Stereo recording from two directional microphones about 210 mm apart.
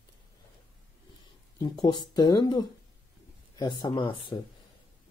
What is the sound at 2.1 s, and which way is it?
Speech, 20° left (ahead or behind).